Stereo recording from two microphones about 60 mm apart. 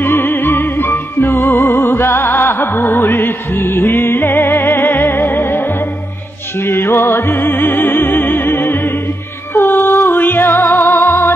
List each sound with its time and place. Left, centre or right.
0.0 s music: left
6.6 s music: left